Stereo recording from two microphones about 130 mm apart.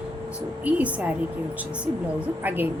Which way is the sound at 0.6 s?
10° right (ahead or behind).